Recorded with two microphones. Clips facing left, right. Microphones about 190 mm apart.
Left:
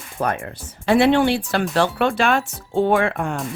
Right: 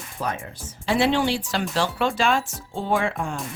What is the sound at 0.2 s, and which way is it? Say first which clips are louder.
Speech: left 6 dB; 60° left (ahead or behind).